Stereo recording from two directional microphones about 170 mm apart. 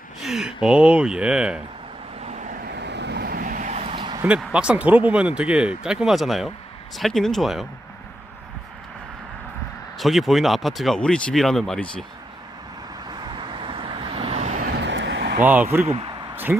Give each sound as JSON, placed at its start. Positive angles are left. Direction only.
{"t": 0.2, "sound": "speech", "side_deg": 0}
{"t": 2.2, "sound": "vehicle", "side_deg": -45}
{"t": 2.6, "sound": "vehicle", "side_deg": -85}
{"t": 4.4, "sound": "speech", "side_deg": -5}
{"t": 10.0, "sound": "speech", "side_deg": 0}
{"t": 13.1, "sound": "vehicle", "side_deg": -25}
{"t": 14.7, "sound": "vehicle", "side_deg": -90}
{"t": 15.4, "sound": "speech", "side_deg": -10}
{"t": 15.9, "sound": "speech", "side_deg": -35}
{"t": 16.3, "sound": "a sound", "side_deg": -10}